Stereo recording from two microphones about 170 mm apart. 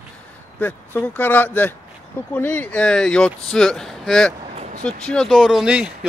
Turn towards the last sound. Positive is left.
turn(degrees=-5)  # may be behind; listen again after turning